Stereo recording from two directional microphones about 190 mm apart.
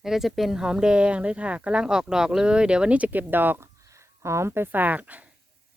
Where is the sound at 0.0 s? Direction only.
Centre (ahead or behind).